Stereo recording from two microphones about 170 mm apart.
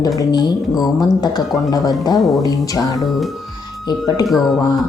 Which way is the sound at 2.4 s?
20° left (ahead or behind).